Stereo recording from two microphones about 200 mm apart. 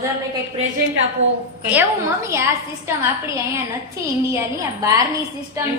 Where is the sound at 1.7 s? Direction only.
10° right (ahead or behind).